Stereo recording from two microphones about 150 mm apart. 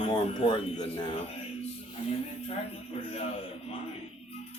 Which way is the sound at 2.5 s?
40° left (ahead or behind).